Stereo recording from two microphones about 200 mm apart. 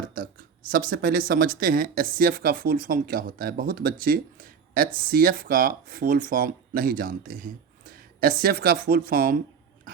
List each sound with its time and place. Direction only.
0.1 s speech: 45° right (ahead or behind)